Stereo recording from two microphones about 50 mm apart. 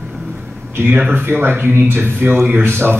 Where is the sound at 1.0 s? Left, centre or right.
Right.